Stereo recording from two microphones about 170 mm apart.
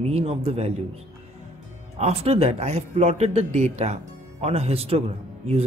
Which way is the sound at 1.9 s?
40° right (ahead or behind).